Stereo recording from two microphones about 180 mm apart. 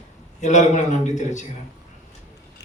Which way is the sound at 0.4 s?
40° left (ahead or behind).